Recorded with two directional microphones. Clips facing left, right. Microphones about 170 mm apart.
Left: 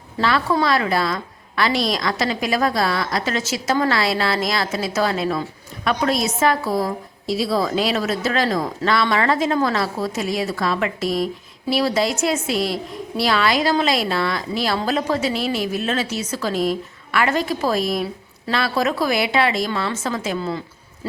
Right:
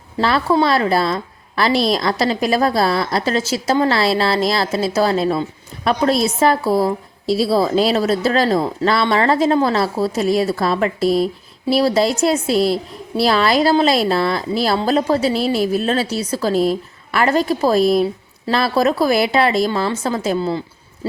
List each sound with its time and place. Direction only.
0.2 s a woman's voice: 35° right (ahead or behind)
21.0 s owl: 30° right (ahead or behind)